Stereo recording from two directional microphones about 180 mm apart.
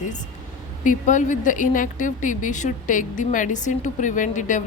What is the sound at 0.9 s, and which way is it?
A woman's voice, 45° left (ahead or behind).